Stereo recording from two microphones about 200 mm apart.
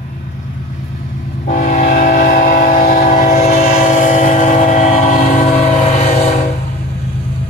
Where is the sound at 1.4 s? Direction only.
40° left (ahead or behind).